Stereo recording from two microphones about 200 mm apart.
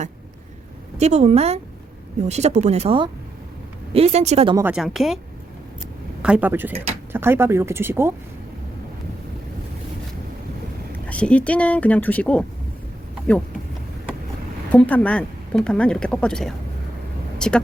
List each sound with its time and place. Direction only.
0.9 s speech: 35° right (ahead or behind)
4.5 s speech: 5° right (ahead or behind)
6.2 s speech: 5° right (ahead or behind)
11.0 s speech: 5° left (ahead or behind)
14.7 s speech: 5° left (ahead or behind)
17.3 s vehicle: 5° left (ahead or behind)